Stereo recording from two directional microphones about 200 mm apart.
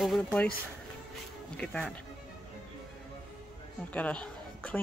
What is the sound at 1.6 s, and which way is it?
Speech, 5° left (ahead or behind).